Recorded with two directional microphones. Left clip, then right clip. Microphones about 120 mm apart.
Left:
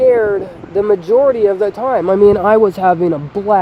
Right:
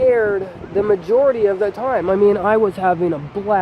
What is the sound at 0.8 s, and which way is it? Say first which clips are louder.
Speech: left 4 dB; 65° left (ahead or behind).